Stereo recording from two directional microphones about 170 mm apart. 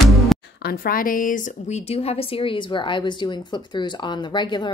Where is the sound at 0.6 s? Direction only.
65° left (ahead or behind).